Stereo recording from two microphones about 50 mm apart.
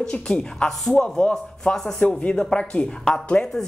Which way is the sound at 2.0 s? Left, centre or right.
Left.